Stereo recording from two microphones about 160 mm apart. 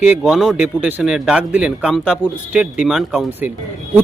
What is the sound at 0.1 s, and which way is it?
Speech, 5° right (ahead or behind).